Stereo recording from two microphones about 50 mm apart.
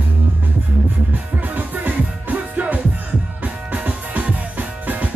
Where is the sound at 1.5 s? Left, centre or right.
Right.